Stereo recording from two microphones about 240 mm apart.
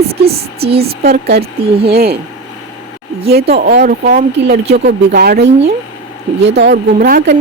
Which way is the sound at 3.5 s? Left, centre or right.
Right.